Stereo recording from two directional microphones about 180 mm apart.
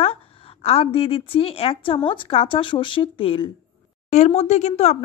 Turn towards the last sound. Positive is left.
turn(degrees=40)  # may be behind; listen again after turning